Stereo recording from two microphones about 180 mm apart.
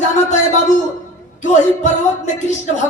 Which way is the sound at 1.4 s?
40° left (ahead or behind).